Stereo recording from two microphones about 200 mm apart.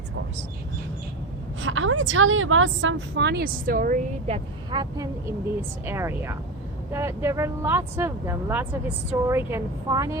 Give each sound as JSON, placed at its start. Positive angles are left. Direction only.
{"t": 1.6, "sound": "a woman's voice", "side_deg": -85}
{"t": 4.3, "sound": "speech", "side_deg": -20}
{"t": 5.8, "sound": "speech", "side_deg": -10}